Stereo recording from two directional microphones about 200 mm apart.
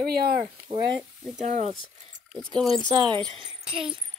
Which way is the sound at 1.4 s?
35° right (ahead or behind).